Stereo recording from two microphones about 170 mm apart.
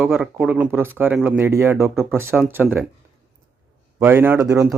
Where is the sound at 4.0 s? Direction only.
15° right (ahead or behind).